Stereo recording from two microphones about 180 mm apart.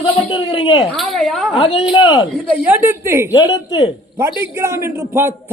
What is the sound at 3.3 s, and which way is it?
Speech, 20° left (ahead or behind).